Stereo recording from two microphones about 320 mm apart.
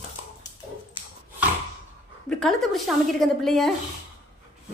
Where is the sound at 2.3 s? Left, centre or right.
Centre.